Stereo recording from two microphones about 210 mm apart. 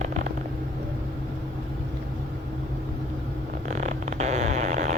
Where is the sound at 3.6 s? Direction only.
35° right (ahead or behind).